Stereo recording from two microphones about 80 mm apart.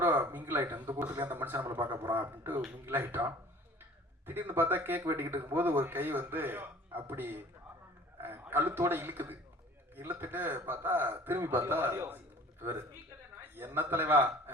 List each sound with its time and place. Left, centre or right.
0.0 s speech: right